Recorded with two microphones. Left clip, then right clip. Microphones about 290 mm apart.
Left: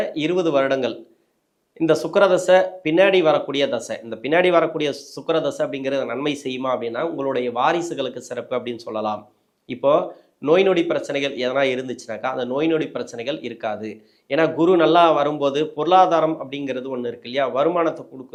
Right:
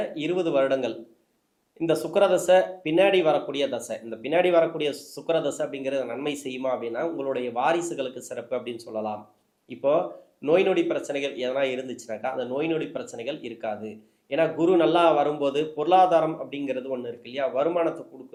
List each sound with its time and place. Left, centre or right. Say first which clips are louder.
0.0 s speech: left 6 dB; left